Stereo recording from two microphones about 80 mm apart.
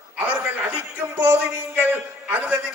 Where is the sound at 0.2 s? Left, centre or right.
Right.